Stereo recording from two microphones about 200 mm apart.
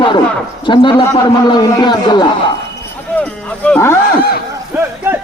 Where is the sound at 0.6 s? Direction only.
25° left (ahead or behind).